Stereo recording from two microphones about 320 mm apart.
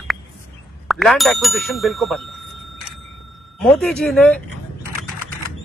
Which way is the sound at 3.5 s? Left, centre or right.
Centre.